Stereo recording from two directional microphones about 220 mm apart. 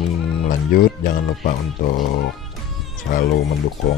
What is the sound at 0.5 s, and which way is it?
Speech, 40° left (ahead or behind).